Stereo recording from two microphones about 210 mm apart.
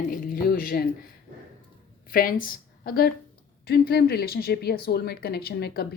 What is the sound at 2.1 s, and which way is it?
A woman's voice, 45° left (ahead or behind).